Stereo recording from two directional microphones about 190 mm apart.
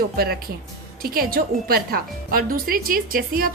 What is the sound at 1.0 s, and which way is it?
Speech, 50° right (ahead or behind).